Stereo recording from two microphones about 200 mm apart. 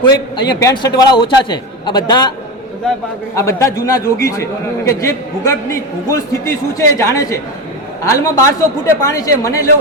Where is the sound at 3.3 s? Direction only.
15° left (ahead or behind).